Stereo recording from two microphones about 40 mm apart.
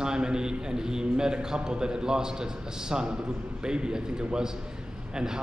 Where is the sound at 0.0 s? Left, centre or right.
Centre.